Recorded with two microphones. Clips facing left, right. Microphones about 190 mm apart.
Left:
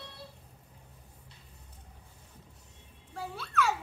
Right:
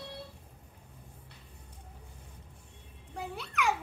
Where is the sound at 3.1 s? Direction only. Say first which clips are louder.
Left 3 dB; 20° right (ahead or behind).